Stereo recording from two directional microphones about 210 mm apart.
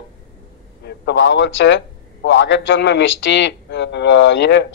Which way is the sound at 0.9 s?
55° left (ahead or behind).